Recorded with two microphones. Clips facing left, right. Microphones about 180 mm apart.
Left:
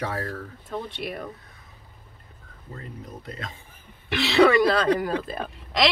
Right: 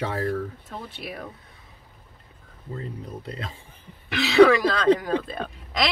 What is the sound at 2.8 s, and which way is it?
Speech, 30° right (ahead or behind).